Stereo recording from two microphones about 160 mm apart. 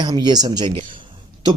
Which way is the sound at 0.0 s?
25° right (ahead or behind).